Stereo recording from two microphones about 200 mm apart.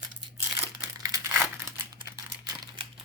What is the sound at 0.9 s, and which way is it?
Crumpling, 20° right (ahead or behind).